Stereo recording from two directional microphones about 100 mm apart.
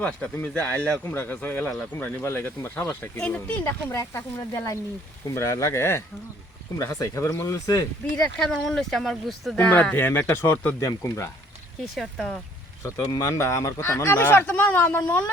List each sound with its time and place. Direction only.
0.4 s speech: 15° left (ahead or behind)
3.2 s speech: 15° left (ahead or behind)
3.6 s speech: 30° left (ahead or behind)
8.2 s speech: 5° left (ahead or behind)
9.6 s speech: 15° left (ahead or behind)
10.8 s speech: 30° left (ahead or behind)
11.9 s speech: centre (ahead or behind)
12.8 s speech: 35° left (ahead or behind); by 15.0 s 20° left (ahead or behind)